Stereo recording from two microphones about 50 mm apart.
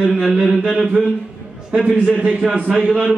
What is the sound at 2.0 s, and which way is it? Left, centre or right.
Speech, right.